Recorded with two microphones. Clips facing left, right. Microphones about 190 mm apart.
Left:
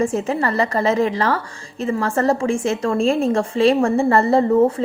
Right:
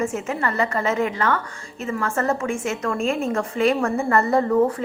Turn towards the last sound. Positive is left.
turn(degrees=25)  # may be behind; listen again after turning